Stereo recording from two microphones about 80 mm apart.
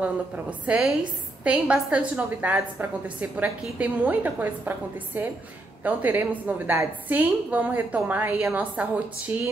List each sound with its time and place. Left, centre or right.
0.0 s a woman's voice: centre
8.8 s a woman's voice: centre